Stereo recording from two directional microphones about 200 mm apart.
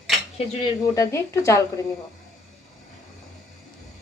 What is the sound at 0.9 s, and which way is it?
Speech, 15° left (ahead or behind).